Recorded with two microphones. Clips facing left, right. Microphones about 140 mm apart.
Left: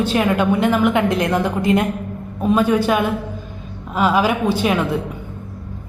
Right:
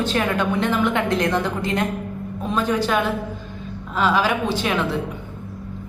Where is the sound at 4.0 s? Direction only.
15° left (ahead or behind).